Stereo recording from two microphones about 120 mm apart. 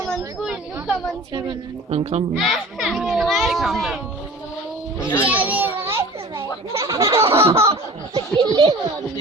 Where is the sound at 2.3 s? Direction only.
5° right (ahead or behind).